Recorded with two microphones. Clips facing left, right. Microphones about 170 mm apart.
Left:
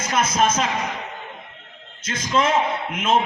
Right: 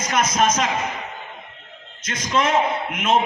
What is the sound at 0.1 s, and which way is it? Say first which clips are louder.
Speech: even; 30° left (ahead or behind).